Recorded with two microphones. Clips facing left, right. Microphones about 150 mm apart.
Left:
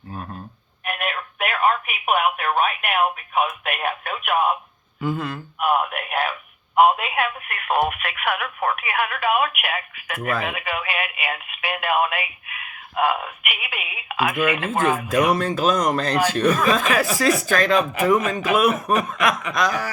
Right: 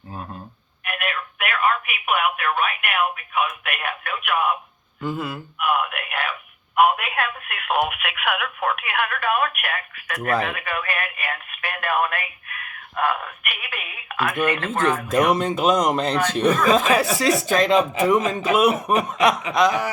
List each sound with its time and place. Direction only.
0.9 s speech: 35° left (ahead or behind)
4.9 s speech: centre (ahead or behind)
5.5 s a sound: 40° left (ahead or behind)
6.7 s telephone: 25° left (ahead or behind)
7.2 s speech: centre (ahead or behind)
10.1 s speech: 5° left (ahead or behind)
13.0 s telephone: 15° left (ahead or behind)
14.5 s speech: 5° left (ahead or behind)
15.3 s speech: 20° right (ahead or behind)